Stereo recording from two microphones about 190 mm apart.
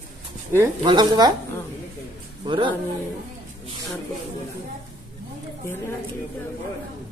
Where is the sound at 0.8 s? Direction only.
20° right (ahead or behind).